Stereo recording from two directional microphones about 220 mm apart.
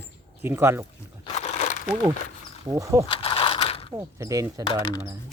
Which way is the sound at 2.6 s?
15° right (ahead or behind).